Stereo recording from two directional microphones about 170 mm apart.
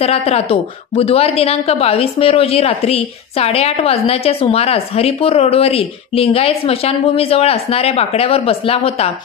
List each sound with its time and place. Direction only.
0.0 s a woman's voice: 35° left (ahead or behind)